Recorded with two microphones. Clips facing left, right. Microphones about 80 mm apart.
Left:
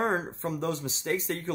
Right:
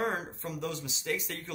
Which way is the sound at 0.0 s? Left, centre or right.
Left.